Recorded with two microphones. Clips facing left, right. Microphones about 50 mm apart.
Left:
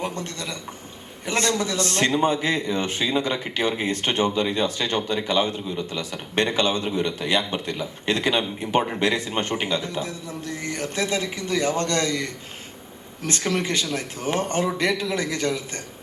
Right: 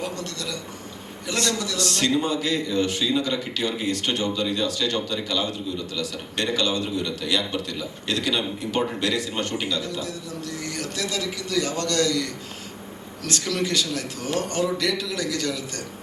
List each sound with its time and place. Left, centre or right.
0.0 s a man's voice: left